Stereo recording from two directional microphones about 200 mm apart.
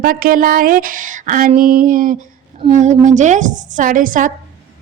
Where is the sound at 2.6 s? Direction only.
35° right (ahead or behind).